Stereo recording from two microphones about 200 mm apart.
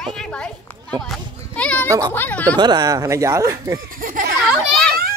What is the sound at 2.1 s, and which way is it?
Speech, 10° left (ahead or behind).